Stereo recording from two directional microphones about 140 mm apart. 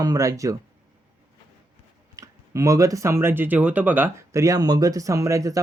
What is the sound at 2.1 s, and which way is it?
Speech, 25° right (ahead or behind).